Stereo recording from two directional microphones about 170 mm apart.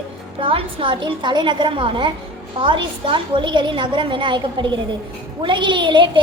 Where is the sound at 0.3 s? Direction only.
30° right (ahead or behind).